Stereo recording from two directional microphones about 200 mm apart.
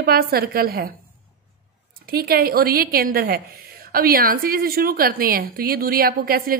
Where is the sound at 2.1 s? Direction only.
50° right (ahead or behind).